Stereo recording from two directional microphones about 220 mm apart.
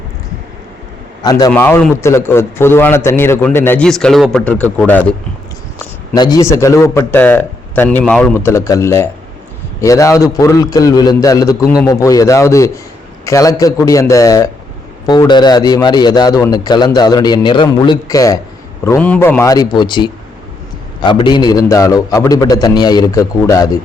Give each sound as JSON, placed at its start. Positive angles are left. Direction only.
{"t": 1.2, "sound": "a man's voice", "side_deg": 20}
{"t": 6.1, "sound": "a man's voice", "side_deg": 20}